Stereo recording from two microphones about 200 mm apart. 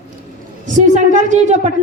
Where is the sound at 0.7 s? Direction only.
40° right (ahead or behind).